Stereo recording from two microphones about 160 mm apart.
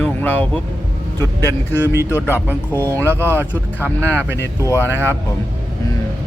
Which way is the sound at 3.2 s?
15° right (ahead or behind).